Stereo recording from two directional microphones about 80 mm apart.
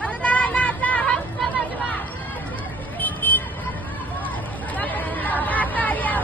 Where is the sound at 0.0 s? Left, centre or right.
Centre.